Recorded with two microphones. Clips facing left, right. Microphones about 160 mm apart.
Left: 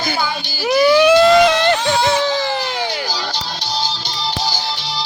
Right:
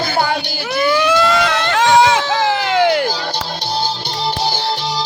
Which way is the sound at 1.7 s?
90° right.